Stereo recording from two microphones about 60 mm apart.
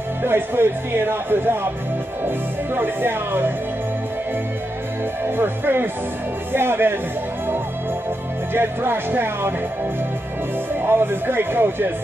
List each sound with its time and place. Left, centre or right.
0.2 s speech: right
5.4 s speech: right
8.5 s speech: right
10.9 s speech: right